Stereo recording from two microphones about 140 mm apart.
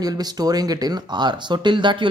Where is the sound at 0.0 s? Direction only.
30° right (ahead or behind).